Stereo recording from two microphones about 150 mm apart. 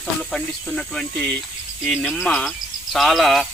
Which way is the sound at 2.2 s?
5° left (ahead or behind).